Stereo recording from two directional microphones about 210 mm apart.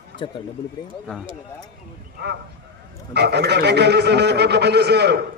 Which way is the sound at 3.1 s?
50° right (ahead or behind).